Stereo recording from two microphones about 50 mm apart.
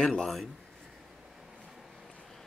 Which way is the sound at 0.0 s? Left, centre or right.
Centre.